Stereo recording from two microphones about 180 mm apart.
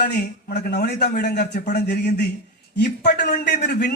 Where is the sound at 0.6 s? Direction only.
65° left (ahead or behind).